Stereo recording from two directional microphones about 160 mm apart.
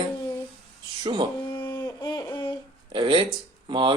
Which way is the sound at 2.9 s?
30° right (ahead or behind).